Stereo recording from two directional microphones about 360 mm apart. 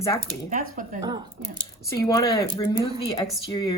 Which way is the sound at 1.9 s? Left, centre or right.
Centre.